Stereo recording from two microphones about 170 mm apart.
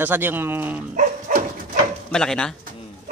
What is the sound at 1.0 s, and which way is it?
Dog, 50° right (ahead or behind).